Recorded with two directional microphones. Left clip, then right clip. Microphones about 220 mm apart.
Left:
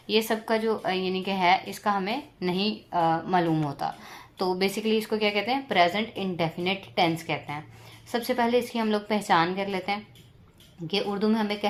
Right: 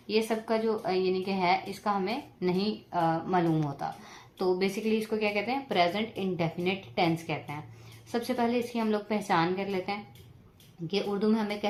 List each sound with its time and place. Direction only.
0.1 s a woman's voice: 35° left (ahead or behind)